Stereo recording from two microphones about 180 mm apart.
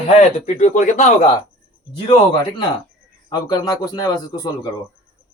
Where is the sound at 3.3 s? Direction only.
20° left (ahead or behind).